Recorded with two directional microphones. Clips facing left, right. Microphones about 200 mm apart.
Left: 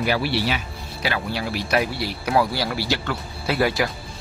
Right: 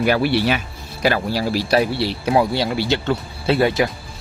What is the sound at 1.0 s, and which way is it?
Speech, 40° right (ahead or behind).